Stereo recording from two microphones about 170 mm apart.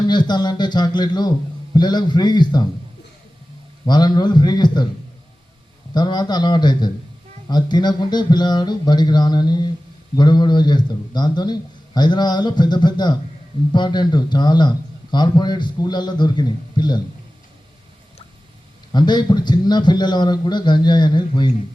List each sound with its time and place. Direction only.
0.1 s a man's voice: 25° left (ahead or behind)
3.8 s a man's voice: 25° left (ahead or behind)
5.9 s a man's voice: 25° left (ahead or behind)
18.9 s a man's voice: 25° left (ahead or behind)